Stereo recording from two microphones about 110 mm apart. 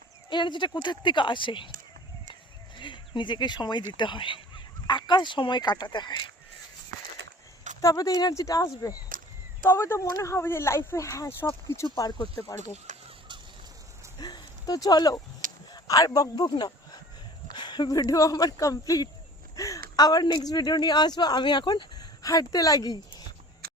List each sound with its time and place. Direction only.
0.3 s speech: 45° left (ahead or behind)
2.7 s speech: 45° left (ahead or behind)
7.8 s speech: 30° left (ahead or behind)
11.9 s speech: 40° left (ahead or behind)
14.2 s speech: 40° left (ahead or behind)